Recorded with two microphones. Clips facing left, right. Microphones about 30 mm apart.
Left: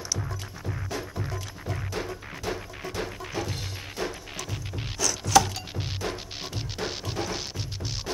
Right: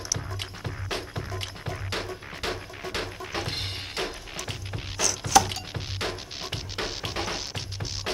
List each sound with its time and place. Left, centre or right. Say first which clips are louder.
0.4 s music: right 1 dB; right
1.9 s music: right 2 dB; right
3.3 s music: right 2 dB; right
5.0 s a sound: even; centre
6.5 s music: even; right